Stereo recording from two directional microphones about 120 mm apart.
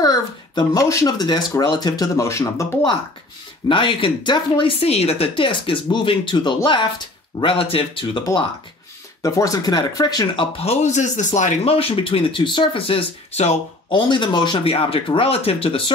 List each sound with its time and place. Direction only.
0.0 s speech: 30° left (ahead or behind)
3.6 s speech: 45° left (ahead or behind)
9.2 s speech: 30° left (ahead or behind)
10.7 s speech: 80° left
11.6 s speech: 55° left (ahead or behind)
13.8 s speech: 45° left (ahead or behind)